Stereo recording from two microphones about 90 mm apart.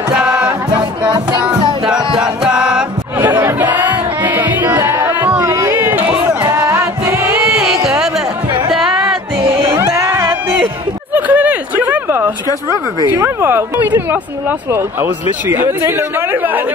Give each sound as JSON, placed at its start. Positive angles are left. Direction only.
{"t": 0.1, "sound": "music", "side_deg": -10}
{"t": 2.1, "sound": "music", "side_deg": -10}
{"t": 3.2, "sound": "chatter", "side_deg": -25}
{"t": 3.7, "sound": "music", "side_deg": -20}
{"t": 5.5, "sound": "a sound", "side_deg": -30}
{"t": 6.5, "sound": "music", "side_deg": -30}
{"t": 7.8, "sound": "music", "side_deg": -5}
{"t": 9.4, "sound": "music", "side_deg": -90}
{"t": 9.8, "sound": "music", "side_deg": -30}
{"t": 11.1, "sound": "a sound", "side_deg": -15}
{"t": 13.1, "sound": "speech", "side_deg": -25}